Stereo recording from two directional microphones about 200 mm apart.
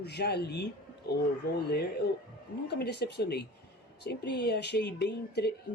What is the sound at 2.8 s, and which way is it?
Speech, 55° left (ahead or behind).